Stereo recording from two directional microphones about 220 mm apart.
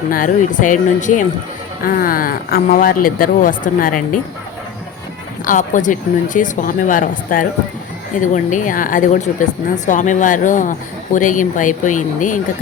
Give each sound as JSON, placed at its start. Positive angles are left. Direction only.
{"t": 0.1, "sound": "speech", "side_deg": 35}
{"t": 5.5, "sound": "speech", "side_deg": 35}